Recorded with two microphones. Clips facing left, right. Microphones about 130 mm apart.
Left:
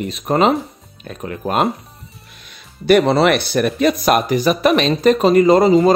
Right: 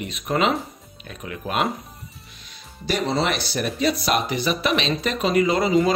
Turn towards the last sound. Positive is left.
turn(degrees=40)  # may be behind; listen again after turning